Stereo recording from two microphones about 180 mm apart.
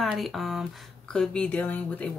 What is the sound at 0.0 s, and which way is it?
Speech, centre (ahead or behind).